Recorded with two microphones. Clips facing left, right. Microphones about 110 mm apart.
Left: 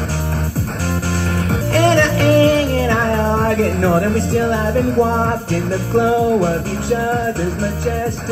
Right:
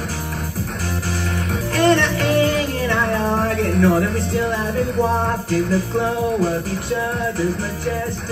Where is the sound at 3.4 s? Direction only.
40° left (ahead or behind).